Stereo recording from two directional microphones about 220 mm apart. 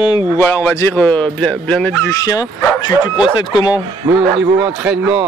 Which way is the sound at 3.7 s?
5° right (ahead or behind).